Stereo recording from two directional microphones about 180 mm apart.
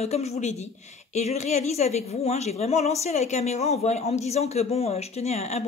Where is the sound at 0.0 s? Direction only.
35° left (ahead or behind).